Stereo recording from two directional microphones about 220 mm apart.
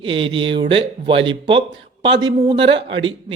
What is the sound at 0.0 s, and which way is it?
Speech, 25° right (ahead or behind).